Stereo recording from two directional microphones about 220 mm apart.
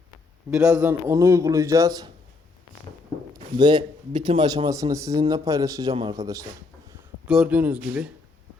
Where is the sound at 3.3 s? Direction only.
20° right (ahead or behind).